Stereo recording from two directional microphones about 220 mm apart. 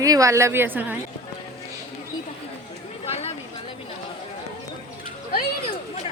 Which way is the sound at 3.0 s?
25° left (ahead or behind).